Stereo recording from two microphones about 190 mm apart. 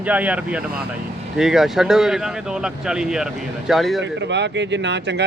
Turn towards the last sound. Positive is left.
turn(degrees=-70)  # may be behind; listen again after turning